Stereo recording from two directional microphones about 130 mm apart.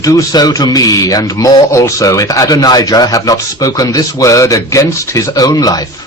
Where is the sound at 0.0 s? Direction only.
25° left (ahead or behind).